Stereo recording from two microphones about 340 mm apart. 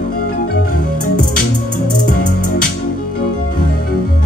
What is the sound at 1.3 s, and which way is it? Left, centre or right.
Music, left.